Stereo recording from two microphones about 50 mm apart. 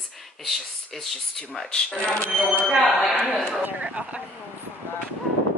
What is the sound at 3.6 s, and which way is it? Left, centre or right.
Speech, right.